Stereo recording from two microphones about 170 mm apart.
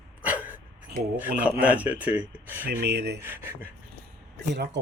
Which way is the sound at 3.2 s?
10° right (ahead or behind).